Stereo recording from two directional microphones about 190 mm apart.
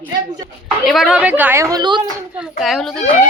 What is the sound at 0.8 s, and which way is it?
A woman's voice, centre (ahead or behind).